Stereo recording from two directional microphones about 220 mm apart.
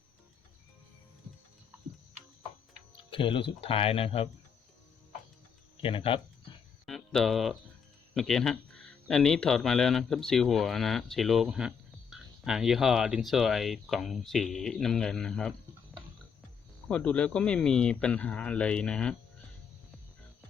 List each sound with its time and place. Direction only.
3.1 s speech: 25° left (ahead or behind)
5.8 s speech: 25° left (ahead or behind)
6.8 s a sound: centre (ahead or behind)
8.1 s speech: centre (ahead or behind)
16.9 s speech: 5° left (ahead or behind)